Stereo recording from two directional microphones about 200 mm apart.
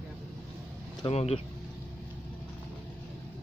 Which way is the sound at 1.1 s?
30° left (ahead or behind).